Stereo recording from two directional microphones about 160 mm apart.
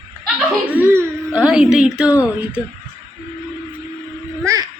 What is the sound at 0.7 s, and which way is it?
Speech, 10° right (ahead or behind).